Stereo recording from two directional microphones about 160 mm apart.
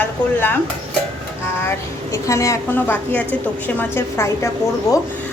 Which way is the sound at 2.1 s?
20° left (ahead or behind).